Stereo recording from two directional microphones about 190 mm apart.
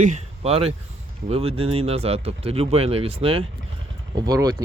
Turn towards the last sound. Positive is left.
turn(degrees=-20)  # may be behind; listen again after turning